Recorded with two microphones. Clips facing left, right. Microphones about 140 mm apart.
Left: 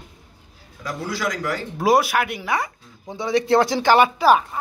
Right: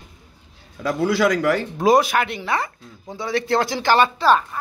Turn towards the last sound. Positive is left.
turn(degrees=10)  # may be behind; listen again after turning